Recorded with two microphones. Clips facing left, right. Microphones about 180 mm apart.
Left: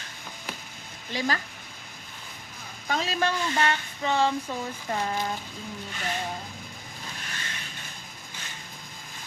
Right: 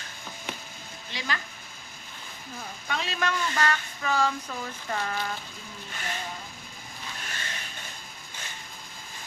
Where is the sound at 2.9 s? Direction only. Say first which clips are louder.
Left 3 dB; 35° left (ahead or behind).